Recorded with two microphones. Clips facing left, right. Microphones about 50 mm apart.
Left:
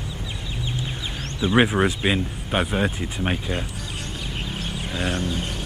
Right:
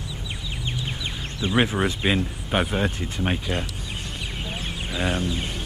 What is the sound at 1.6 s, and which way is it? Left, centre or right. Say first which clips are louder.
Speech: left 3 dB; centre.